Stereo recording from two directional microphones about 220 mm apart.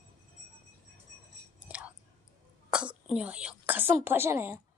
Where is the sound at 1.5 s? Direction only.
5° right (ahead or behind).